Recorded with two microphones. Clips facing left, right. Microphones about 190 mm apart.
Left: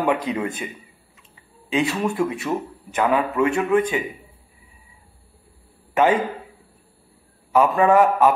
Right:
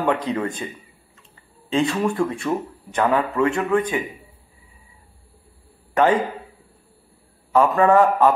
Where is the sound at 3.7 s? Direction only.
20° left (ahead or behind).